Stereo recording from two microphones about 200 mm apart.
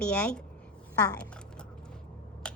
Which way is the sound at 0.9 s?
15° left (ahead or behind).